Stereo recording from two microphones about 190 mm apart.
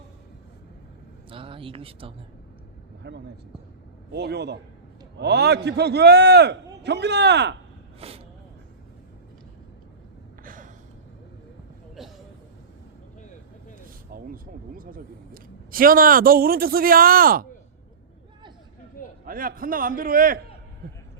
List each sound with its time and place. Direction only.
1.3 s speech: 30° right (ahead or behind)
3.0 s a man's voice: 60° right (ahead or behind)
7.9 s speech: 30° right (ahead or behind)
10.4 s gasp: 45° right (ahead or behind)
12.0 s a sound: centre (ahead or behind)
14.1 s a man's voice: 50° right (ahead or behind)
19.2 s a man's voice: 50° right (ahead or behind)